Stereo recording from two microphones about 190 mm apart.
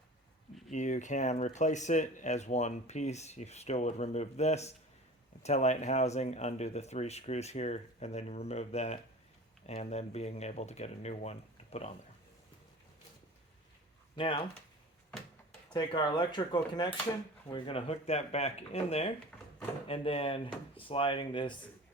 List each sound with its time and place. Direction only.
0.7 s speech: 40° left (ahead or behind)
14.2 s speech: 30° left (ahead or behind)
15.7 s speech: 25° left (ahead or behind)